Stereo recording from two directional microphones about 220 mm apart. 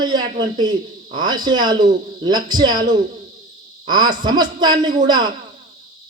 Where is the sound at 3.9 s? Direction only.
20° right (ahead or behind).